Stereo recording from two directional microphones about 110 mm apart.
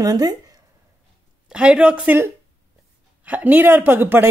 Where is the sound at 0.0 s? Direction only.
35° right (ahead or behind).